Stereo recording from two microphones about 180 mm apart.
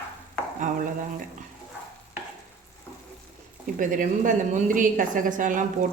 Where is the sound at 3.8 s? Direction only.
45° right (ahead or behind).